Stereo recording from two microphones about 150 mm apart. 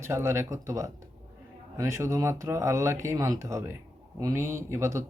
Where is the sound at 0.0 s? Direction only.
15° right (ahead or behind).